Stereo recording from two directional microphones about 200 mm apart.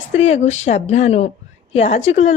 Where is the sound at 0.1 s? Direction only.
35° left (ahead or behind).